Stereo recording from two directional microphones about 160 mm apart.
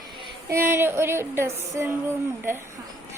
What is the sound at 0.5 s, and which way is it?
A woman's voice, 15° right (ahead or behind).